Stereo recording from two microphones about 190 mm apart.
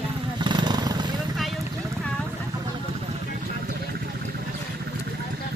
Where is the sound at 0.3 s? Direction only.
25° right (ahead or behind).